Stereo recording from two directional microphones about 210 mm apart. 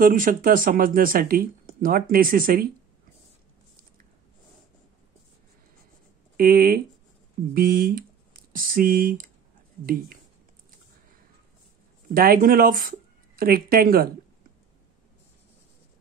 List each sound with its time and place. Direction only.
0.0 s speech: 40° right (ahead or behind)
6.3 s speech: 45° right (ahead or behind)
12.1 s speech: 40° right (ahead or behind)